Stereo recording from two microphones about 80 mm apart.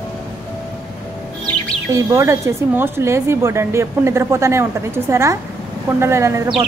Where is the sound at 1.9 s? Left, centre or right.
Right.